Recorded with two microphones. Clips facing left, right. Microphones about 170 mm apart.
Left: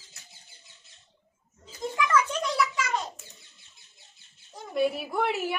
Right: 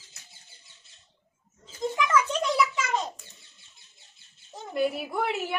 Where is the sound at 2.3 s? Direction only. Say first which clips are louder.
Right 2 dB; 25° right (ahead or behind).